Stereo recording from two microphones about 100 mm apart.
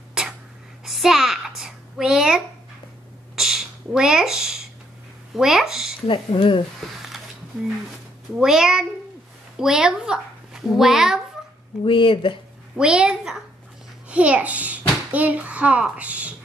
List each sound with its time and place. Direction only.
0.2 s writing: 5° right (ahead or behind)
0.8 s a sound: 5° right (ahead or behind)
5.3 s speech: 5° right (ahead or behind)
6.0 s speech: 55° left (ahead or behind)
8.4 s a child's voice: 5° right (ahead or behind)
11.8 s speech: 60° left (ahead or behind)
12.7 s a child's voice: 10° right (ahead or behind)